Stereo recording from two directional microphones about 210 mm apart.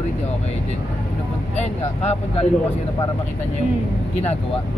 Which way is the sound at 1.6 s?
30° left (ahead or behind).